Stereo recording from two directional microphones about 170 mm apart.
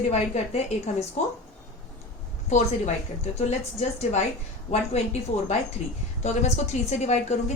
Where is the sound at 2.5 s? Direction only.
40° left (ahead or behind).